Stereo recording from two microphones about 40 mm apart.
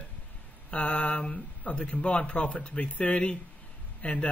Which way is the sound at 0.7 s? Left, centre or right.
Left.